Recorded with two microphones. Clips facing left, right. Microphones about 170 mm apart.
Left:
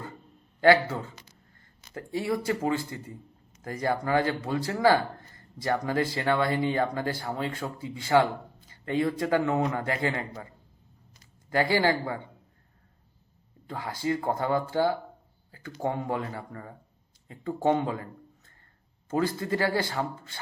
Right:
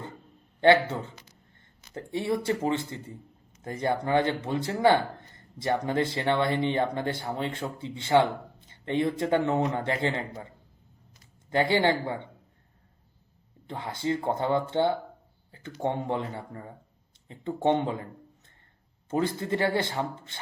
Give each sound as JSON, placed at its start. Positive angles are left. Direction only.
{"t": 0.6, "sound": "speech", "side_deg": -25}
{"t": 11.5, "sound": "speech", "side_deg": -25}
{"t": 13.7, "sound": "speech", "side_deg": -25}
{"t": 19.1, "sound": "speech", "side_deg": -25}